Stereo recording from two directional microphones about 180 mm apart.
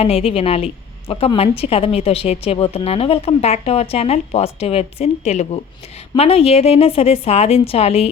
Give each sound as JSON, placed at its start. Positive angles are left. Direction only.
{"t": 0.0, "sound": "a woman's voice", "side_deg": 35}